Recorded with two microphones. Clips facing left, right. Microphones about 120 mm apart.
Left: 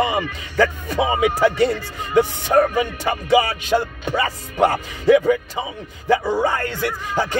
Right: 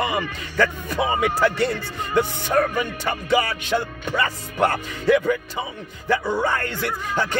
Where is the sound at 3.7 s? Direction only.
40° left (ahead or behind).